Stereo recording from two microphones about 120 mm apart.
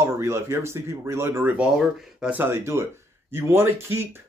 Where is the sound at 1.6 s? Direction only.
5° right (ahead or behind).